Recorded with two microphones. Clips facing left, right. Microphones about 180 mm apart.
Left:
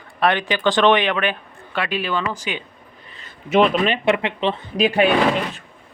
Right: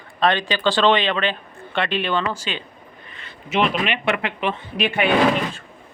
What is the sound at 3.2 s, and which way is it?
Speech, 45° left (ahead or behind).